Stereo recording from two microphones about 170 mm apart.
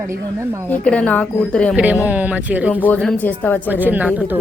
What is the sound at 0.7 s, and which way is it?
A woman's voice, 5° left (ahead or behind).